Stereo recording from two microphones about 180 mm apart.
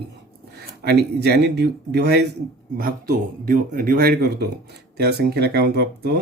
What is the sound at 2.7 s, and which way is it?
Speech, 55° right (ahead or behind).